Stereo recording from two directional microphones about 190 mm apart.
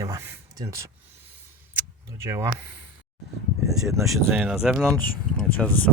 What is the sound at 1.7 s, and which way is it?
Vehicle, 15° right (ahead or behind).